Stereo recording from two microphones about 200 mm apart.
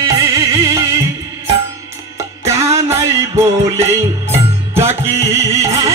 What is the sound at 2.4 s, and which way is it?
Music, 15° right (ahead or behind).